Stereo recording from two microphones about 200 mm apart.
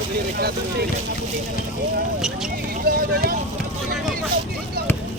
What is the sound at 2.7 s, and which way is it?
Speech, 45° right (ahead or behind).